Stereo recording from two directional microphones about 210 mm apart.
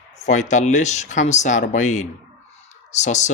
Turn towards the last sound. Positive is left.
turn(degrees=35)  # may be behind; listen again after turning